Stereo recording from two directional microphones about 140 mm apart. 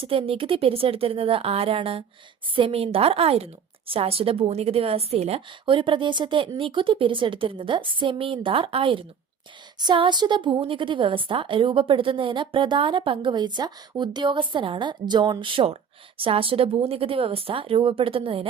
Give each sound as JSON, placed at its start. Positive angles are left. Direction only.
{"t": 0.0, "sound": "a woman's voice", "side_deg": -40}